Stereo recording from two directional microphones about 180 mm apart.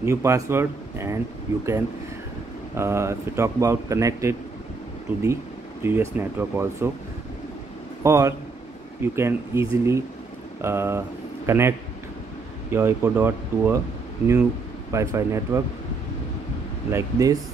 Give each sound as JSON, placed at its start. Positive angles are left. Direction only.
{"t": 0.0, "sound": "speech", "side_deg": -15}
{"t": 2.7, "sound": "speech", "side_deg": -15}
{"t": 8.0, "sound": "speech", "side_deg": -15}
{"t": 12.7, "sound": "speech", "side_deg": -15}
{"t": 14.9, "sound": "speech", "side_deg": -15}
{"t": 16.9, "sound": "speech", "side_deg": -20}